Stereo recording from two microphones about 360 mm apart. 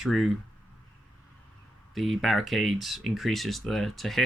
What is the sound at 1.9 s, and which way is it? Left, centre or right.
Speech, centre.